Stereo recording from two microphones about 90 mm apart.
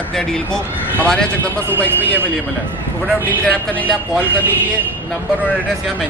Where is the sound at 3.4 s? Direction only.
15° left (ahead or behind).